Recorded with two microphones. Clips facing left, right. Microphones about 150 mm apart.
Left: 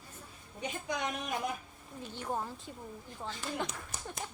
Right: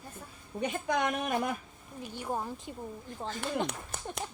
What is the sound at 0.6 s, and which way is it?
Speech, 60° right (ahead or behind).